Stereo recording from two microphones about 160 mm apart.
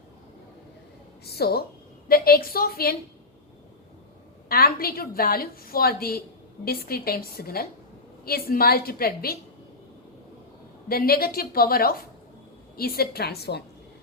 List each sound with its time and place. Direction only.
1.2 s a woman's voice: 80° left
2.0 s a woman's voice: 70° left (ahead or behind)
4.4 s a woman's voice: 70° left (ahead or behind)
10.8 s a woman's voice: 70° left (ahead or behind); by 13.7 s 90° left